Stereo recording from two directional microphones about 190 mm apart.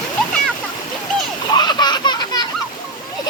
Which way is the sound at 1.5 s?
20° left (ahead or behind).